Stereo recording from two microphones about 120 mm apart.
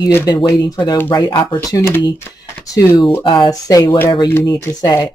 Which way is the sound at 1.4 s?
15° left (ahead or behind).